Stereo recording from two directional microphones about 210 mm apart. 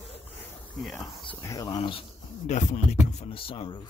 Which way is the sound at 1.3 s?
15° left (ahead or behind).